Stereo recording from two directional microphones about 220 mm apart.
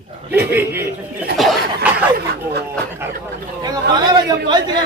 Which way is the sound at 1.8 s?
5° right (ahead or behind).